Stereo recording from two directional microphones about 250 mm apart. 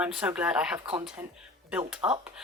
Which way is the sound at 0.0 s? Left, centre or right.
Centre.